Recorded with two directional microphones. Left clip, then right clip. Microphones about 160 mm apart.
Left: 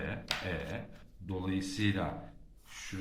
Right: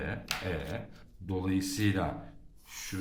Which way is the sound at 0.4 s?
35° right (ahead or behind).